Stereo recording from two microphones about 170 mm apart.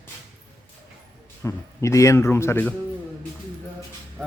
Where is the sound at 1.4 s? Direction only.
15° left (ahead or behind).